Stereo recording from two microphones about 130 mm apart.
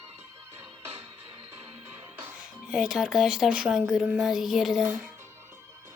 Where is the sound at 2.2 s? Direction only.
5° right (ahead or behind).